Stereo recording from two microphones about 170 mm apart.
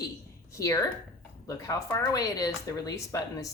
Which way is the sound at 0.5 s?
15° left (ahead or behind).